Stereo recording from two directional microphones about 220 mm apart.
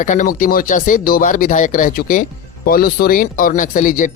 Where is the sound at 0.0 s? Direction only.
35° left (ahead or behind).